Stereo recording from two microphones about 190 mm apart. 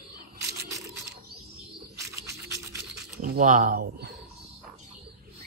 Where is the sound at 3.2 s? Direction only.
40° right (ahead or behind).